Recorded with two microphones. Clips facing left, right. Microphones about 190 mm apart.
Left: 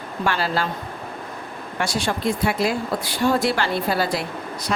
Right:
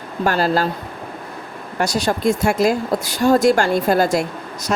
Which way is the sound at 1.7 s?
40° right (ahead or behind).